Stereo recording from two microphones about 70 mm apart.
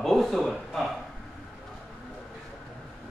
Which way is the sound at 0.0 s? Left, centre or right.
Centre.